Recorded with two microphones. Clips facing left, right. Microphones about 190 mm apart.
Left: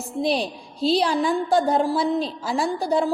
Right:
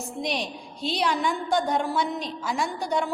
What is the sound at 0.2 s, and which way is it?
A woman's voice, 35° left (ahead or behind).